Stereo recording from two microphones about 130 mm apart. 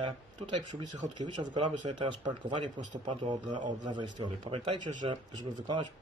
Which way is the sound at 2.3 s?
40° right (ahead or behind).